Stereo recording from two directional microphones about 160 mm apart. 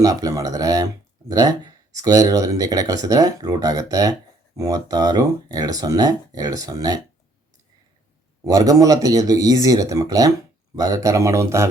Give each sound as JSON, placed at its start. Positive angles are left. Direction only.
{"t": 0.0, "sound": "speech", "side_deg": -20}
{"t": 8.4, "sound": "speech", "side_deg": -20}